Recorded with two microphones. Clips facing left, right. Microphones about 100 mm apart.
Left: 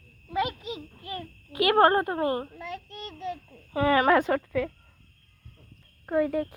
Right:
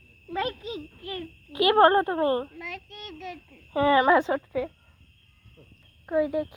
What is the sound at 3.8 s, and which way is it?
Speech, 25° right (ahead or behind).